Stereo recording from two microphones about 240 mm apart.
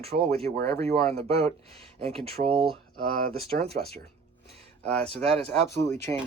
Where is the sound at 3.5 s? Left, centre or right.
Right.